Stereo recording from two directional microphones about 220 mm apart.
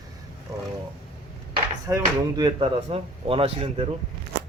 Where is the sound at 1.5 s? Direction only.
15° right (ahead or behind).